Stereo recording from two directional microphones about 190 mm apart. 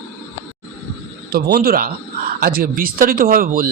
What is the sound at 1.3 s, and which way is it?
A man's voice, 55° right (ahead or behind).